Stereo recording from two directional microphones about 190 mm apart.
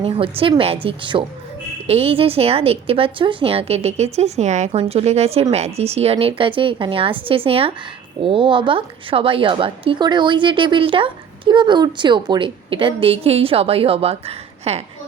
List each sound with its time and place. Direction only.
0.0 s a woman's voice: 30° right (ahead or behind)